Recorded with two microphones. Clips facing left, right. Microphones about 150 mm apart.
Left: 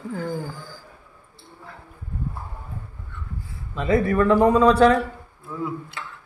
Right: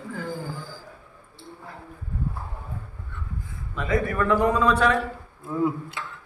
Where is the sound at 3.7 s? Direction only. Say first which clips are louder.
Left 5 dB; 30° left (ahead or behind).